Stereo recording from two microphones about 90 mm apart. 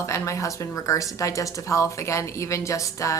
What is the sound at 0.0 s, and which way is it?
Speech, 35° left (ahead or behind).